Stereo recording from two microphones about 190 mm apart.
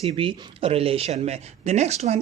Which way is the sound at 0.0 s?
30° right (ahead or behind).